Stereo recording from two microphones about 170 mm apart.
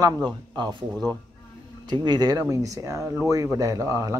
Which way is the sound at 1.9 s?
25° right (ahead or behind).